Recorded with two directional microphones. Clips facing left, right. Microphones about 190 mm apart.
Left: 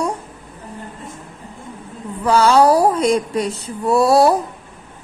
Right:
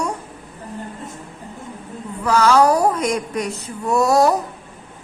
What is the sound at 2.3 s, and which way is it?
Speech, 30° left (ahead or behind).